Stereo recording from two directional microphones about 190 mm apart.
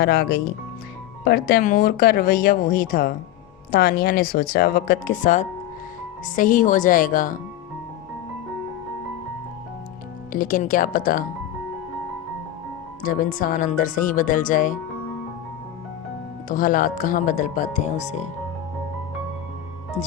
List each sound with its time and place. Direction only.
0.0 s speech: 55° left (ahead or behind)
10.3 s speech: 45° left (ahead or behind)
13.0 s speech: 45° left (ahead or behind)
16.5 s speech: 45° left (ahead or behind)